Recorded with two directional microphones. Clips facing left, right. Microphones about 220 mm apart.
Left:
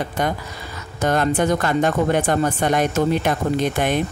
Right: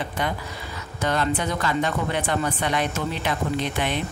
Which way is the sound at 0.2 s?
45° left (ahead or behind).